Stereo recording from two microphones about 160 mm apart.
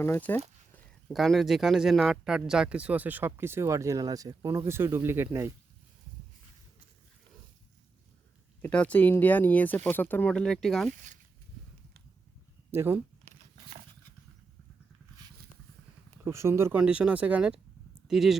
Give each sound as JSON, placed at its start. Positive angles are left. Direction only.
{"t": 0.0, "sound": "speech", "side_deg": 15}
{"t": 1.0, "sound": "speech", "side_deg": 0}
{"t": 8.6, "sound": "speech", "side_deg": 10}
{"t": 12.7, "sound": "speech", "side_deg": -15}
{"t": 16.2, "sound": "speech", "side_deg": -15}